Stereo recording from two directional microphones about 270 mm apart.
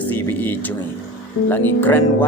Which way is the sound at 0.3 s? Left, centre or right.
Centre.